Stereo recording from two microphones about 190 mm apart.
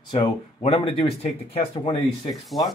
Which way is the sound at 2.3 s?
Centre (ahead or behind).